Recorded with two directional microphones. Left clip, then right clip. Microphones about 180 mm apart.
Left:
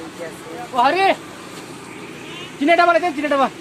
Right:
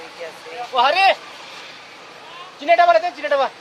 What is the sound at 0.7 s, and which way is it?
Speech, 60° right (ahead or behind).